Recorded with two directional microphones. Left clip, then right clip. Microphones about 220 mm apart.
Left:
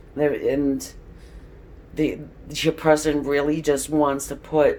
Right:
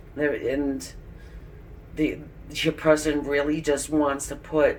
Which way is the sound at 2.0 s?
35° left (ahead or behind).